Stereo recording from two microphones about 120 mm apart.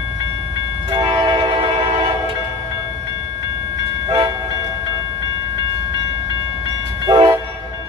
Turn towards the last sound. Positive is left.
turn(degrees=-50)  # may be behind; listen again after turning